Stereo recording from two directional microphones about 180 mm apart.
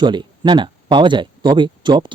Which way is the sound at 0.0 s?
25° right (ahead or behind).